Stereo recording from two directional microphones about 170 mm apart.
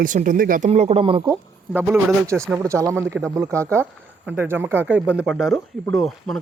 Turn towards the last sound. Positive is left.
turn(degrees=0)  # may be behind; listen again after turning